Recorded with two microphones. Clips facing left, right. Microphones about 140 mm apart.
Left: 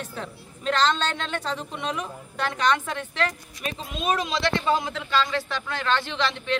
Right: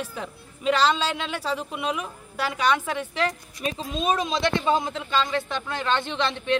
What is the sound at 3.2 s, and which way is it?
A woman's voice, 30° right (ahead or behind).